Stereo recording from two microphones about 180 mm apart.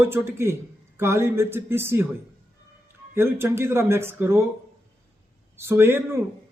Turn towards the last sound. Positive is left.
turn(degrees=-15)  # may be behind; listen again after turning